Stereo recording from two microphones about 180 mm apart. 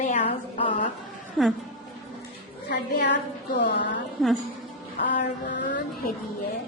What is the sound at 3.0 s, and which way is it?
Speech, 75° left (ahead or behind).